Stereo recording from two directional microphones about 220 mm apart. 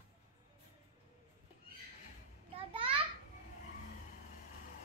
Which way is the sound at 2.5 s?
25° right (ahead or behind).